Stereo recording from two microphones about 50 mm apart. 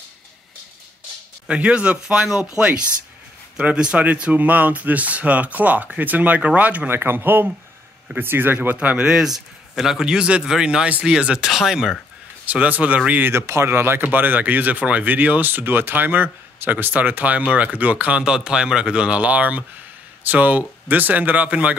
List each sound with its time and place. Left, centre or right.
1.5 s speech: right
2.6 s speech: right
4.0 s speech: right
6.9 s speech: right
8.5 s speech: right
8.9 s speech: centre
12.4 s speech: right
13.2 s speech: right
14.1 s speech: right